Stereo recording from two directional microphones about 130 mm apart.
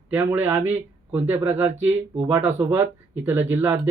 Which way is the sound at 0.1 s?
15° right (ahead or behind).